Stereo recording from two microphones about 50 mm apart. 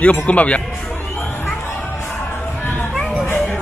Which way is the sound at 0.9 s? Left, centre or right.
Left.